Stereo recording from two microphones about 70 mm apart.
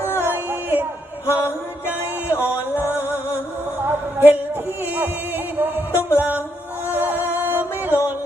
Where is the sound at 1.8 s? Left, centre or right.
Right.